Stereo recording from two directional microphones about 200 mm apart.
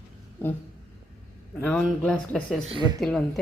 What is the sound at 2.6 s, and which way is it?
Speech, 25° right (ahead or behind).